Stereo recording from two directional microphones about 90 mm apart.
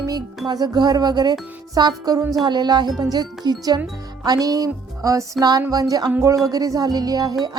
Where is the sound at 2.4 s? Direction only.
50° right (ahead or behind).